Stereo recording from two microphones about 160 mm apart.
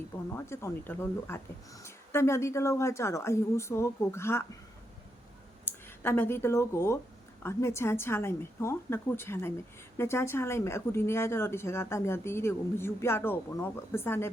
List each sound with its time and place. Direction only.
0.3 s speech: 15° left (ahead or behind)
5.6 s speech: 15° left (ahead or behind)